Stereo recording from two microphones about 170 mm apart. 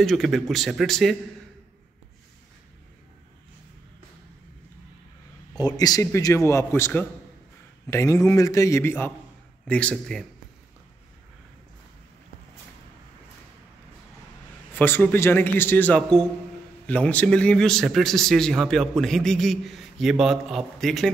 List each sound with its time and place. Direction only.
0.0 s a man's voice: centre (ahead or behind)
5.6 s a man's voice: 25° left (ahead or behind); by 10.2 s 5° left (ahead or behind)
14.7 s a man's voice: 10° left (ahead or behind)